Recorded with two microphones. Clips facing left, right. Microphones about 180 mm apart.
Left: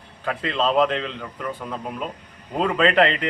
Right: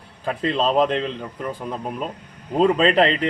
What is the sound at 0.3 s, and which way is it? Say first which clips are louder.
Speech: right 2 dB; 30° right (ahead or behind).